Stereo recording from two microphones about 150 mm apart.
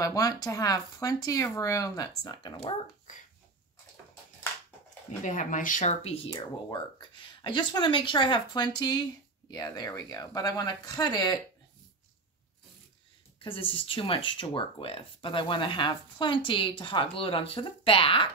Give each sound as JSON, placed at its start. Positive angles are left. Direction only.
{"t": 0.0, "sound": "speech", "side_deg": 25}
{"t": 5.2, "sound": "speech", "side_deg": 60}
{"t": 13.4, "sound": "speech", "side_deg": 35}